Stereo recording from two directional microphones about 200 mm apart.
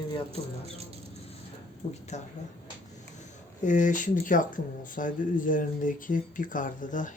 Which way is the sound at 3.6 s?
40° left (ahead or behind).